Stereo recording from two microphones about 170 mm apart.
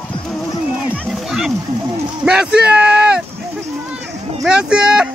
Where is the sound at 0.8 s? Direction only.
Centre (ahead or behind).